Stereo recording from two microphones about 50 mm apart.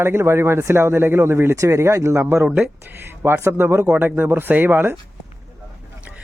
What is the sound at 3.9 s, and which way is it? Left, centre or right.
Speech, right.